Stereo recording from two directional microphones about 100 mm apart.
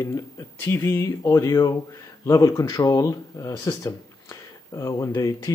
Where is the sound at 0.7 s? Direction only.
30° left (ahead or behind).